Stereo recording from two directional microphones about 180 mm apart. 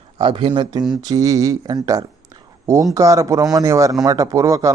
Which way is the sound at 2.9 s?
20° right (ahead or behind).